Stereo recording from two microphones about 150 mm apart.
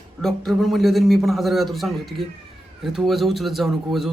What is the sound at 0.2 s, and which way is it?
Speech, centre (ahead or behind).